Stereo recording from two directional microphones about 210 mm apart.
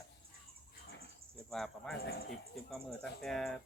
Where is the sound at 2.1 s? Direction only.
50° left (ahead or behind).